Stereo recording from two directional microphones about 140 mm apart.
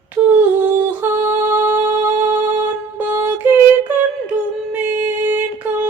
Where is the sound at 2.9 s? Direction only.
15° right (ahead or behind).